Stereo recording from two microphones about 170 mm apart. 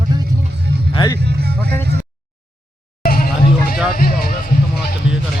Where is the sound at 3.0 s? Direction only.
60° left (ahead or behind).